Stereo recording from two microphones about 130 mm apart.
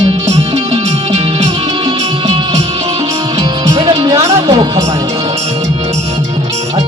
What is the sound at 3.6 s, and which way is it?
Music, 35° right (ahead or behind).